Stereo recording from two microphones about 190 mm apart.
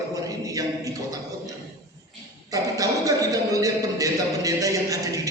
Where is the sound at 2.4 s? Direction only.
20° right (ahead or behind).